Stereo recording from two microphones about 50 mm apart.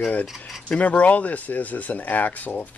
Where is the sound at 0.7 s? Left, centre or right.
Left.